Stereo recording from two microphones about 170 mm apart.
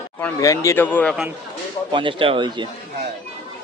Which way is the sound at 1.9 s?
30° right (ahead or behind).